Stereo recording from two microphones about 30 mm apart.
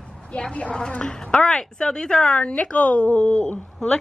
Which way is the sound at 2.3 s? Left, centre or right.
Left.